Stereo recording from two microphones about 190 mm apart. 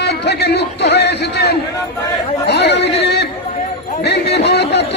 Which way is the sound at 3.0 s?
60° left (ahead or behind).